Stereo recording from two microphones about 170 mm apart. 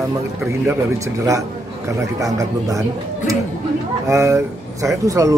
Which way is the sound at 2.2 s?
20° right (ahead or behind).